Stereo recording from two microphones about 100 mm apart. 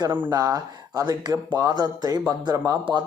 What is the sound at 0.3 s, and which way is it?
Speech, 35° right (ahead or behind).